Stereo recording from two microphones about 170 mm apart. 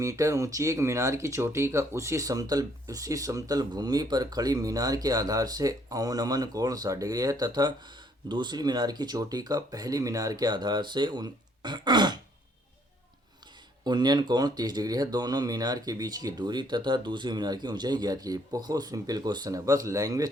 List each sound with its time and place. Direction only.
0.0 s speech: 20° right (ahead or behind)
13.8 s speech: 25° right (ahead or behind)